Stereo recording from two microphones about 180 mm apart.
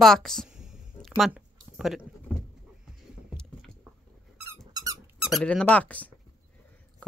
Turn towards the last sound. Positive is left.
turn(degrees=10)  # may be behind; listen again after turning